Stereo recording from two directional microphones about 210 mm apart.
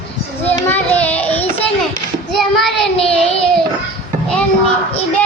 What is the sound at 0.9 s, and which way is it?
Child singing, 5° left (ahead or behind).